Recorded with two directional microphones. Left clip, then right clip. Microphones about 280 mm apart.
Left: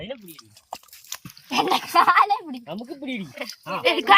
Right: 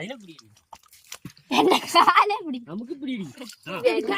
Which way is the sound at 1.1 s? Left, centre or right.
Centre.